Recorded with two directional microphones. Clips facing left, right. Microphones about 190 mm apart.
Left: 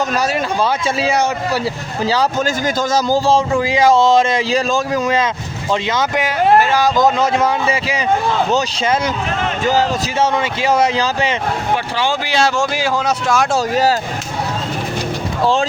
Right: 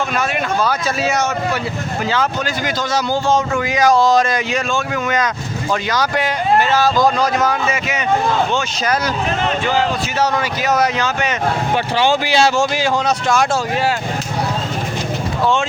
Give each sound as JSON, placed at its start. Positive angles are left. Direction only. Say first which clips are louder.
{"t": 0.2, "sound": "a man's voice", "louder": "left 1 dB", "side_deg": 30}
{"t": 2.0, "sound": "a man's voice", "louder": "left 4 dB", "side_deg": 40}
{"t": 6.6, "sound": "speech", "louder": "left 1 dB", "side_deg": 10}
{"t": 10.2, "sound": "speech", "louder": "left 2 dB", "side_deg": 25}
{"t": 12.3, "sound": "speech", "louder": "right 2 dB", "side_deg": -5}
{"t": 12.7, "sound": "speech", "louder": "even", "side_deg": 10}